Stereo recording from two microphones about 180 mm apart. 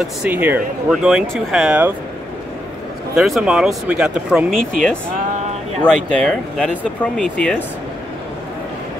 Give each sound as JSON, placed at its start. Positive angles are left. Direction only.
{"t": 0.2, "sound": "speech", "side_deg": -10}
{"t": 3.2, "sound": "speech", "side_deg": 0}
{"t": 5.8, "sound": "speech", "side_deg": 5}